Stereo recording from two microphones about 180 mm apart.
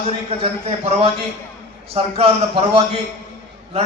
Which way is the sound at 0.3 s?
35° right (ahead or behind).